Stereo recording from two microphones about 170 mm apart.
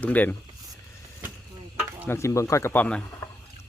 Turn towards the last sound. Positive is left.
turn(degrees=10)  # may be behind; listen again after turning